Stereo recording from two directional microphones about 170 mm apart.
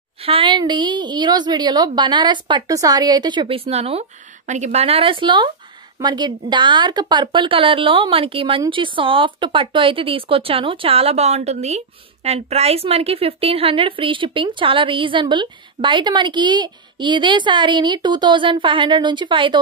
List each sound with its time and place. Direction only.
0.2 s a woman's voice: 30° right (ahead or behind)